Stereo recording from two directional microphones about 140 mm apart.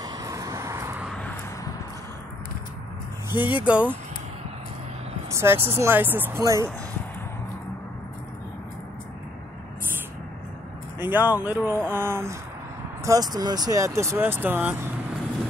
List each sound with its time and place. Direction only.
0.0 s vehicle: 25° right (ahead or behind)
1.0 s vehicle: 5° left (ahead or behind)
3.4 s speech: 10° right (ahead or behind)
5.3 s speech: 20° right (ahead or behind)
11.0 s speech: 15° right (ahead or behind)